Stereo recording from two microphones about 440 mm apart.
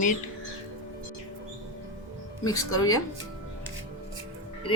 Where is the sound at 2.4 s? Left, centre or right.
Centre.